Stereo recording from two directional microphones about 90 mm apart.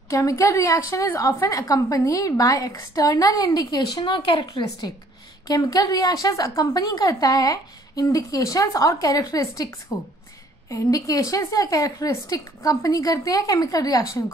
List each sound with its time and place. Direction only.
0.1 s a woman's voice: 35° left (ahead or behind); by 4.9 s 60° left (ahead or behind)
5.5 s a woman's voice: 50° left (ahead or behind)